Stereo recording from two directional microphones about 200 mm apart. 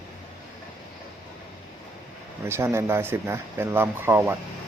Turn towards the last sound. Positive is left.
turn(degrees=-10)  # may be behind; listen again after turning